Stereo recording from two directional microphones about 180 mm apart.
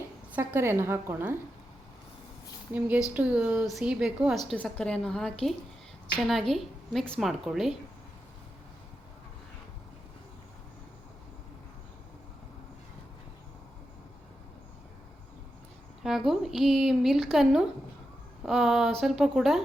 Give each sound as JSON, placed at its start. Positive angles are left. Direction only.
{"t": 0.3, "sound": "a woman's voice", "side_deg": -15}
{"t": 2.7, "sound": "a woman's voice", "side_deg": -10}
{"t": 4.4, "sound": "a woman's voice", "side_deg": 5}
{"t": 16.0, "sound": "a woman's voice", "side_deg": 0}